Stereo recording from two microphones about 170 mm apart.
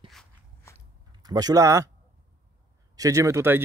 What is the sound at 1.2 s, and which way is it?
Speech, 20° right (ahead or behind).